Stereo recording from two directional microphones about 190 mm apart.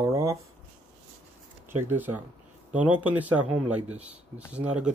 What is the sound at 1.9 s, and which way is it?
Speech, 10° right (ahead or behind).